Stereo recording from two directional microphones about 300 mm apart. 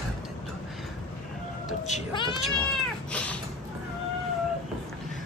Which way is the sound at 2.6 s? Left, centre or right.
Centre.